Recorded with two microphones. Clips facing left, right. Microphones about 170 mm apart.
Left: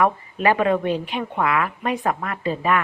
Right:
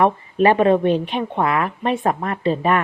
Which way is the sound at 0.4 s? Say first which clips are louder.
Right 5 dB; 30° right (ahead or behind).